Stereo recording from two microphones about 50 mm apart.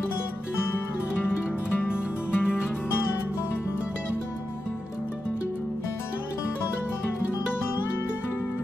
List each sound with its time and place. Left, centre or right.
1.9 s music: centre